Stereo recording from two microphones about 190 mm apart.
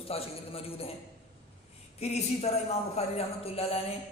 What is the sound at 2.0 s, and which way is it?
A man's voice, 35° left (ahead or behind).